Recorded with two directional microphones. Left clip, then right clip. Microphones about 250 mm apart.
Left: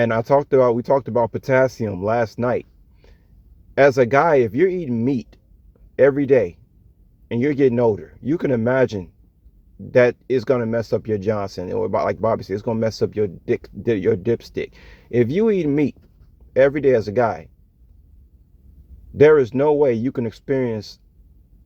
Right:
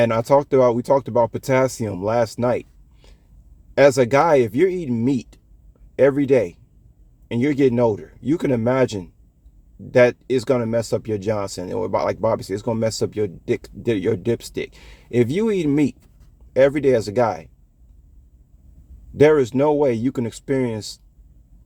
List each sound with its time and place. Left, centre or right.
0.0 s speech: centre
19.2 s speech: centre